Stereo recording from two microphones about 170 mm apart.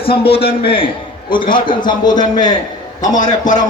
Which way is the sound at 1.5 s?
25° left (ahead or behind).